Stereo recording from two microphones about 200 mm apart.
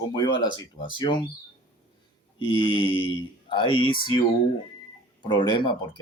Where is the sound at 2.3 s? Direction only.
25° left (ahead or behind).